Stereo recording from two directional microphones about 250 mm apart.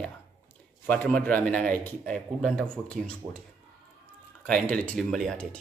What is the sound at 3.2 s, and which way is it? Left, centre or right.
Speech, centre.